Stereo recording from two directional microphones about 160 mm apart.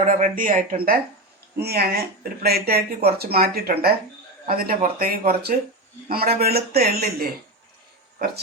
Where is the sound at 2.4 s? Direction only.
75° right (ahead or behind).